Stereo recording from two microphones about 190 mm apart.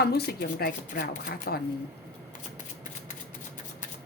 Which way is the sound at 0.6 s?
50° left (ahead or behind).